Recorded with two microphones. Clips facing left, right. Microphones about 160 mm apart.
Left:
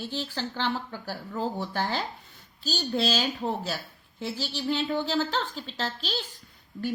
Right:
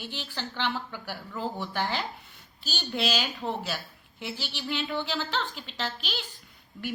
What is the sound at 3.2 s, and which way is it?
A woman's voice, 35° left (ahead or behind).